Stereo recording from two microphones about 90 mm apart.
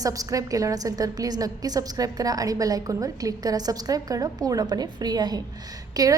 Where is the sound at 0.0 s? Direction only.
40° right (ahead or behind).